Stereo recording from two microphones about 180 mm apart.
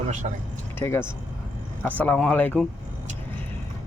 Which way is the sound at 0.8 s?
15° left (ahead or behind).